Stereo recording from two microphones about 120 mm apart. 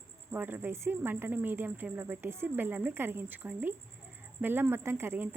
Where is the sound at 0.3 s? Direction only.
15° right (ahead or behind).